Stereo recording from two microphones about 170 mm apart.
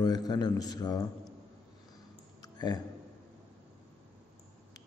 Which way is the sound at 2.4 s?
25° left (ahead or behind).